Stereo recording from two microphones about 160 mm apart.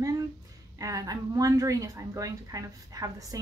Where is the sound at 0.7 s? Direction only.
20° right (ahead or behind).